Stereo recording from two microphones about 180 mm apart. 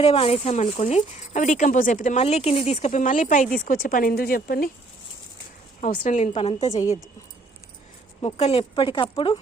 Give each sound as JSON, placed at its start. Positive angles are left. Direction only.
{"t": 0.0, "sound": "speech", "side_deg": 35}
{"t": 6.0, "sound": "speech", "side_deg": 45}
{"t": 6.7, "sound": "speech", "side_deg": 20}
{"t": 8.2, "sound": "speech", "side_deg": 35}